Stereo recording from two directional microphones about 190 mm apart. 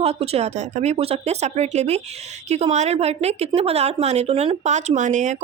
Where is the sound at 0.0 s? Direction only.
35° right (ahead or behind).